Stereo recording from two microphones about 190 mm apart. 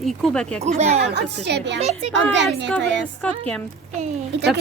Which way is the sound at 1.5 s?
65° right (ahead or behind).